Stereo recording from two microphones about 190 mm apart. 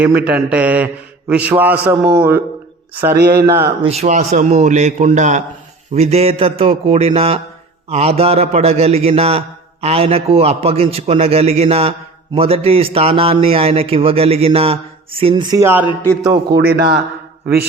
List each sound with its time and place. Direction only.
0.0 s speech: 5° right (ahead or behind)
3.2 s speech: 55° right (ahead or behind)
3.4 s speech: 15° right (ahead or behind)
3.8 s a man's voice: 35° right (ahead or behind); by 15.9 s 10° right (ahead or behind)
16.5 s speech: 55° right (ahead or behind)